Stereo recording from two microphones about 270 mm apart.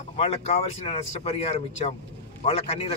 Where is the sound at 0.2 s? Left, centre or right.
Left.